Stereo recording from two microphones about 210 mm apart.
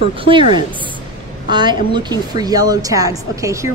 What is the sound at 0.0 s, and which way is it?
Speech, 25° right (ahead or behind).